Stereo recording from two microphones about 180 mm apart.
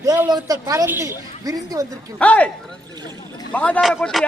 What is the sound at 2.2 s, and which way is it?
Speech, 10° left (ahead or behind).